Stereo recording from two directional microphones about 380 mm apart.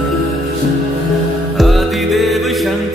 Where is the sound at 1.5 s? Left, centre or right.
Centre.